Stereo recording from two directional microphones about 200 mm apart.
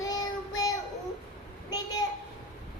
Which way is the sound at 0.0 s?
20° left (ahead or behind).